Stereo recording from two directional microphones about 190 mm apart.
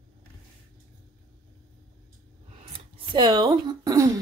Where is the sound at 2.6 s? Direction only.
25° right (ahead or behind).